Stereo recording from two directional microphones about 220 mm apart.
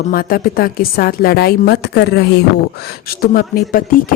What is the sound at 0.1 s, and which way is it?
A woman's voice, 40° left (ahead or behind).